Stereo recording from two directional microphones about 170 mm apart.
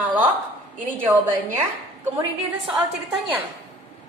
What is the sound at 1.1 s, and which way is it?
Speech, 15° right (ahead or behind).